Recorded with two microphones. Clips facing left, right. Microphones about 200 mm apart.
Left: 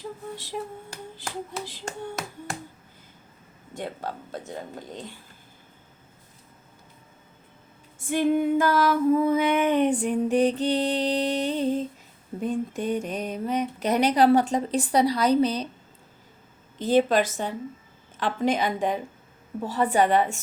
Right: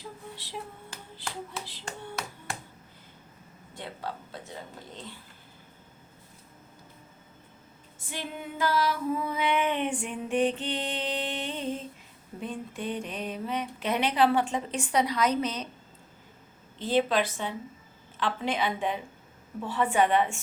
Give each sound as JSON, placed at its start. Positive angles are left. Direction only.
{"t": 0.3, "sound": "hands", "side_deg": 45}
{"t": 3.8, "sound": "hands", "side_deg": 45}
{"t": 7.9, "sound": "female singing", "side_deg": 50}
{"t": 16.7, "sound": "hands", "side_deg": 45}
{"t": 19.6, "sound": "female singing", "side_deg": 40}